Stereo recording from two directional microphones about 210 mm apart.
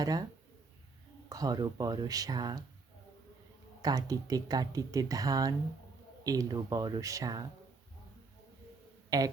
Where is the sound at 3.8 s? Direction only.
15° right (ahead or behind).